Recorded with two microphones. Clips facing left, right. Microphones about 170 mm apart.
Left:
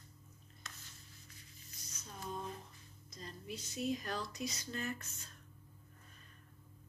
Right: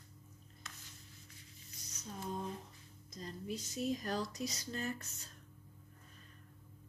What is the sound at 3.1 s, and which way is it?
Speech, 40° right (ahead or behind).